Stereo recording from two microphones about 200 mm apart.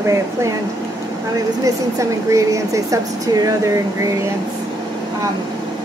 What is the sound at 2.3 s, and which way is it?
Speech, 15° right (ahead or behind).